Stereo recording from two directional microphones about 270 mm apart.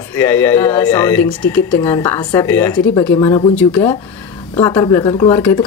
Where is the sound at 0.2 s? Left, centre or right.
Centre.